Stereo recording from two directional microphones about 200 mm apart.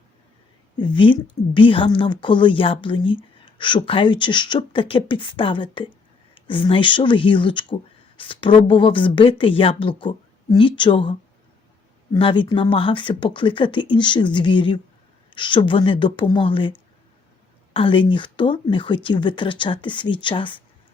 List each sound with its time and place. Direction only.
0.8 s a woman's voice: 25° left (ahead or behind)